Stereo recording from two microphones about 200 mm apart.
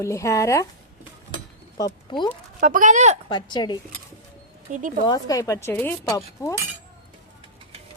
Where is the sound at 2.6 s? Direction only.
40° right (ahead or behind).